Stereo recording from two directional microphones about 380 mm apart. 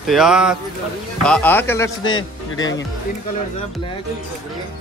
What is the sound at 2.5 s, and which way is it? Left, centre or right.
Speech, left.